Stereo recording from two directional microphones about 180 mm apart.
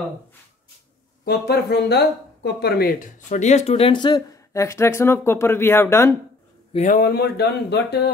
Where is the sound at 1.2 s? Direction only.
65° left (ahead or behind); by 6.1 s 15° left (ahead or behind).